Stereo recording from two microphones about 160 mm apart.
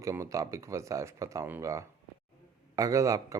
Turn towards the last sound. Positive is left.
turn(degrees=-20)  # may be behind; listen again after turning